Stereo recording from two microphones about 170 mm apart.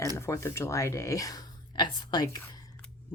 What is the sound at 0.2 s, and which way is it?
Speech, 15° left (ahead or behind).